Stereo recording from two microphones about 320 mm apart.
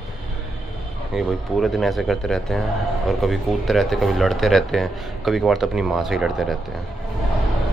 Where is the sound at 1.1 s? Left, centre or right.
Centre.